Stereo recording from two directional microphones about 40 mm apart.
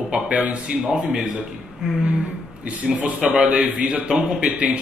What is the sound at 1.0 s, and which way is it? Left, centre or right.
Speech, centre.